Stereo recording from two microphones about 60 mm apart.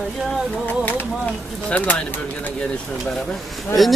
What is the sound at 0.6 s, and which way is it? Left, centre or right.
Music, left.